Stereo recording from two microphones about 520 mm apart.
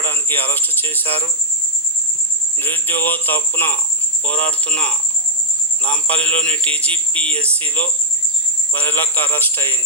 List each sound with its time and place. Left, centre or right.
0.0 s speech: centre
2.6 s a man's voice: centre